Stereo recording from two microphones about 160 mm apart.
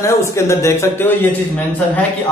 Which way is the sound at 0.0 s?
15° left (ahead or behind).